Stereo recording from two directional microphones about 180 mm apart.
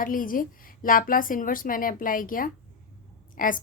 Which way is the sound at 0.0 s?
50° left (ahead or behind).